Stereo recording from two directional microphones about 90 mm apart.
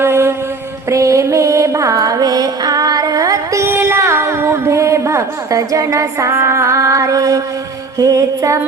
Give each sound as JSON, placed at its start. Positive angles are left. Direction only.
{"t": 0.0, "sound": "mantra", "side_deg": -30}
{"t": 0.9, "sound": "music", "side_deg": -35}